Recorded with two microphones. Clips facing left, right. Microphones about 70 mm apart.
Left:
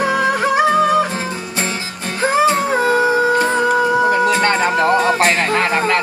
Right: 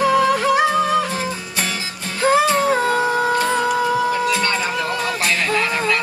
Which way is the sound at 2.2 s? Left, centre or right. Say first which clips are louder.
Left 1 dB; left.